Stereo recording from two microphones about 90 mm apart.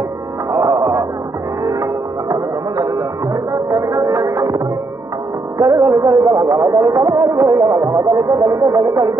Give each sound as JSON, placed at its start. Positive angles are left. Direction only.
{"t": 0.5, "sound": "music", "side_deg": -40}
{"t": 7.6, "sound": "speech", "side_deg": -45}